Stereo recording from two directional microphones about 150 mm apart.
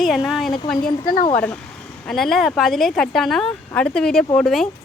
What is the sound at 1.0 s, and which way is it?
Speech, 70° left (ahead or behind).